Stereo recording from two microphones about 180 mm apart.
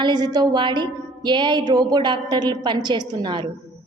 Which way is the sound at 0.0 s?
25° right (ahead or behind).